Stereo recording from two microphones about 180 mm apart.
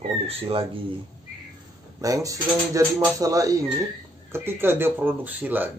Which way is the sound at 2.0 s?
20° right (ahead or behind).